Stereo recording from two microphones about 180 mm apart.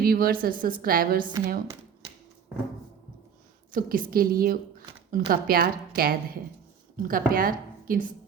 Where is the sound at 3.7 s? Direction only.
50° right (ahead or behind).